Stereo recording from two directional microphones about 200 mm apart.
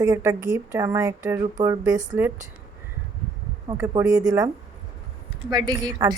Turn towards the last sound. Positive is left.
turn(degrees=-20)  # may be behind; listen again after turning